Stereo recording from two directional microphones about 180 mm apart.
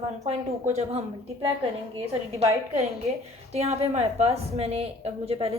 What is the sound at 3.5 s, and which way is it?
A woman's voice, 35° right (ahead or behind).